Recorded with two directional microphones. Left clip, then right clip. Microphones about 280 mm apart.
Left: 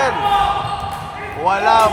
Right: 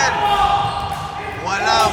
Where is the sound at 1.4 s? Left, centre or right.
Centre.